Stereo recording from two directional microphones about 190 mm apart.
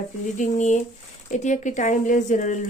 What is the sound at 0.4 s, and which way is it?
Speech, 40° left (ahead or behind).